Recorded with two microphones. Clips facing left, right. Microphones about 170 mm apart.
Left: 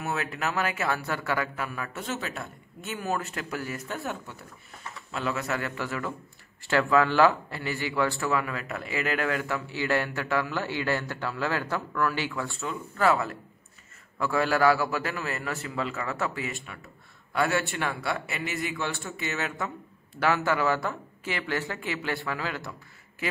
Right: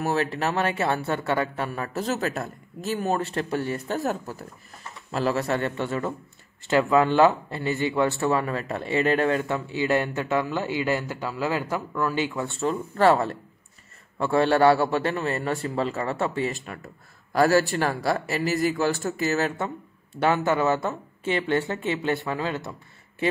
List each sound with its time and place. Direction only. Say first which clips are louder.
0.0 s a man's voice: right 6 dB; 35° right (ahead or behind)
12.5 s speech: right 7 dB; 35° right (ahead or behind)
16.6 s speech: right 6 dB; 50° right (ahead or behind)
20.2 s a man's voice: right 3 dB; 20° right (ahead or behind)